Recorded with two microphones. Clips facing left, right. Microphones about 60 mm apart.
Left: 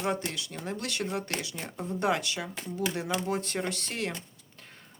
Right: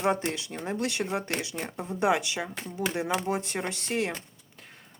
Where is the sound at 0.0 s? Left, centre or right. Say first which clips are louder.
Right 4 dB; right.